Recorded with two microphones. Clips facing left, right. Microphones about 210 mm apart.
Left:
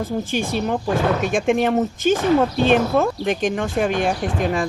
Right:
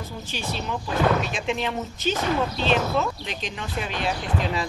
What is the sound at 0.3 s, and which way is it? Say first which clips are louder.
Speech: left 6 dB; 50° left (ahead or behind).